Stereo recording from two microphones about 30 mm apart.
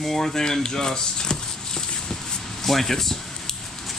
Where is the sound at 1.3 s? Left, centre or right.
Centre.